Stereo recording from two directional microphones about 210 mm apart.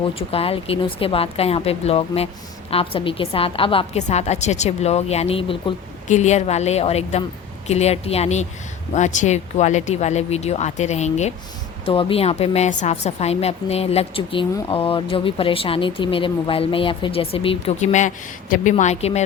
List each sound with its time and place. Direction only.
0.0 s a woman's voice: 25° left (ahead or behind)